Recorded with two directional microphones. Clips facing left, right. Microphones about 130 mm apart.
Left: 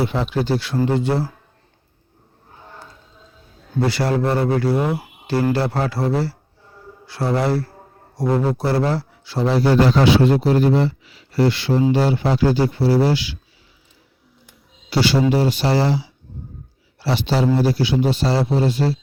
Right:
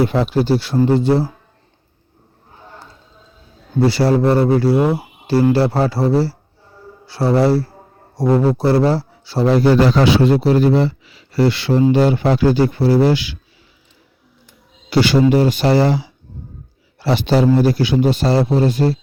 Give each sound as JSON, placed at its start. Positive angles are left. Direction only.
{"t": 0.0, "sound": "speech", "side_deg": -40}
{"t": 3.8, "sound": "speech", "side_deg": -30}
{"t": 9.8, "sound": "speech", "side_deg": -90}
{"t": 14.8, "sound": "speech", "side_deg": -55}